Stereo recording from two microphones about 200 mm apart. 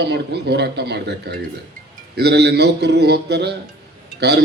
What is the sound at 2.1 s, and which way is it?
Speech, 55° right (ahead or behind).